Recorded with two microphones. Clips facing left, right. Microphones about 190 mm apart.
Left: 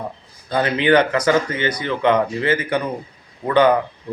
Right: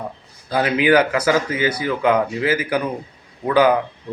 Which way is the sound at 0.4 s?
5° right (ahead or behind).